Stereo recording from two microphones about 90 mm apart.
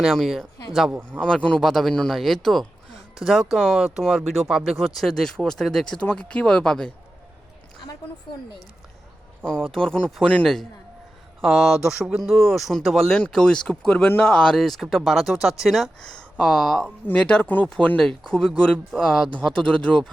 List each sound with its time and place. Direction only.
0.0 s speech: centre (ahead or behind)
1.1 s speech: 10° left (ahead or behind)
9.4 s speech: 10° left (ahead or behind)
11.4 s speech: 5° right (ahead or behind)
14.0 s speech: 20° left (ahead or behind)
14.3 s speech: 5° left (ahead or behind)
17.1 s speech: 15° left (ahead or behind)